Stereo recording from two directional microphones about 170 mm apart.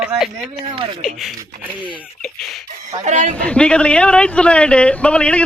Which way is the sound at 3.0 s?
45° right (ahead or behind).